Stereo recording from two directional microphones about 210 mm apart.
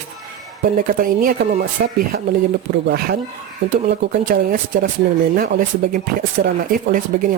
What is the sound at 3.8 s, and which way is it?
Speech, 40° right (ahead or behind).